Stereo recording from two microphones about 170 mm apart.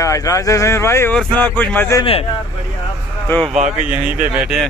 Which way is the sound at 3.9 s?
5° right (ahead or behind).